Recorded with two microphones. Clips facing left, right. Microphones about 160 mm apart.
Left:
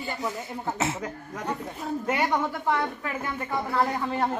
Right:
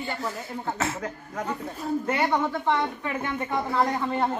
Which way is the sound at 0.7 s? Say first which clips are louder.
Left 2 dB; 20° left (ahead or behind).